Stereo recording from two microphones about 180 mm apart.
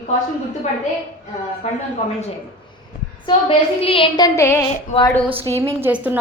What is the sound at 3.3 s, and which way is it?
A woman's voice, 30° left (ahead or behind).